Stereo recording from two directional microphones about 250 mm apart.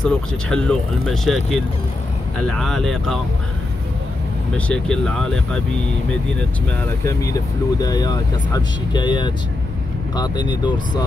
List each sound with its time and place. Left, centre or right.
0.0 s speech: centre
4.6 s speech: centre
7.1 s speech: centre